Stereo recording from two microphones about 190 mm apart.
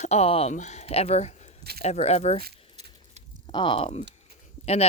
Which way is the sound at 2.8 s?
35° right (ahead or behind).